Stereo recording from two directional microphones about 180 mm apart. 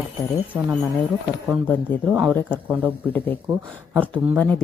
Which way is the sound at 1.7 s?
5° left (ahead or behind).